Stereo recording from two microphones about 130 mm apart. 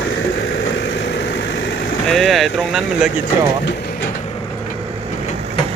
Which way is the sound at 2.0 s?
Centre (ahead or behind).